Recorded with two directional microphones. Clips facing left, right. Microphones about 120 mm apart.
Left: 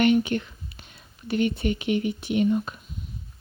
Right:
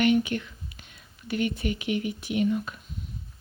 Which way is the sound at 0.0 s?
35° left (ahead or behind).